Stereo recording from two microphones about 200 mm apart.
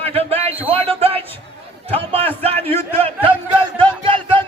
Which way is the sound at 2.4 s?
30° right (ahead or behind).